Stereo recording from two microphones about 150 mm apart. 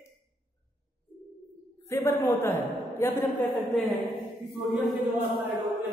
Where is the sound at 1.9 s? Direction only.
15° left (ahead or behind).